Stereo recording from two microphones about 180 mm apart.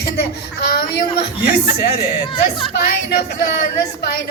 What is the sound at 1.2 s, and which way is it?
Speech, 65° left (ahead or behind).